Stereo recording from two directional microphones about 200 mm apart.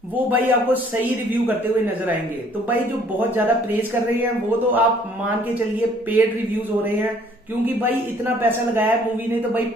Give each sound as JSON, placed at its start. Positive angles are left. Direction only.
{"t": 0.1, "sound": "speech", "side_deg": -10}
{"t": 2.7, "sound": "speech", "side_deg": -10}
{"t": 8.4, "sound": "speech", "side_deg": -10}